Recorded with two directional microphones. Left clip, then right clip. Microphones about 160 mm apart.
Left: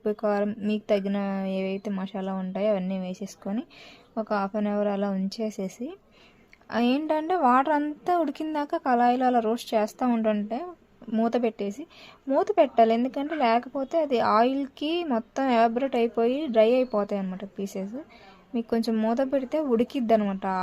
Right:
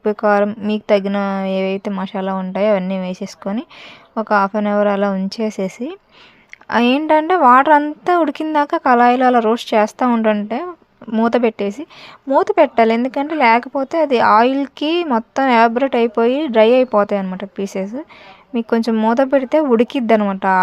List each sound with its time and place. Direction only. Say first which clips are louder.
0.0 s speech: right 11 dB; 30° right (ahead or behind)